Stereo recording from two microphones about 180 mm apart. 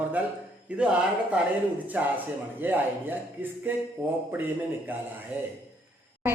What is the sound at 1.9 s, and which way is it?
A woman's voice, 10° right (ahead or behind).